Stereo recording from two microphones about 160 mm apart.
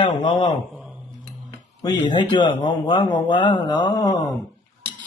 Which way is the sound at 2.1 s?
30° left (ahead or behind).